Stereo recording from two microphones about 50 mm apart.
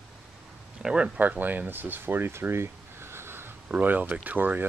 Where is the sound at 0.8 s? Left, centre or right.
Centre.